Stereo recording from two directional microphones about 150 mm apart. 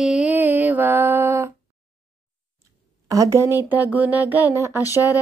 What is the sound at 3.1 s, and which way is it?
Speech, 20° right (ahead or behind).